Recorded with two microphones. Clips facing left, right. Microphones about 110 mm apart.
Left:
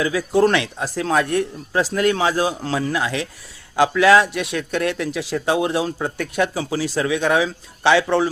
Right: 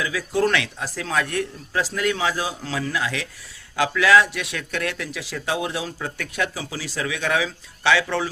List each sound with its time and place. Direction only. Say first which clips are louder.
0.4 s speech: left 4 dB; 35° left (ahead or behind)
6.1 s speech: left 5 dB; 30° left (ahead or behind)
6.5 s speech: left 9 dB; 45° left (ahead or behind)